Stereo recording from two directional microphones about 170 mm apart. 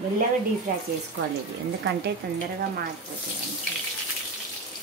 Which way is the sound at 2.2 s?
70° right (ahead or behind).